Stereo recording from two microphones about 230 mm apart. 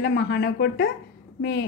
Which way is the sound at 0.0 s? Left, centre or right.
Left.